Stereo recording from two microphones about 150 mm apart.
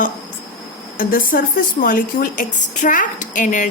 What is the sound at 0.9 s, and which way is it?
Speech, 70° left (ahead or behind).